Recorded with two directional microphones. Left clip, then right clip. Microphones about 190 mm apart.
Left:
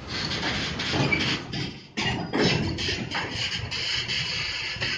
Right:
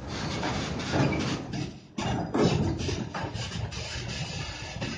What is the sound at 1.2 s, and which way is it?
Music, 65° right (ahead or behind).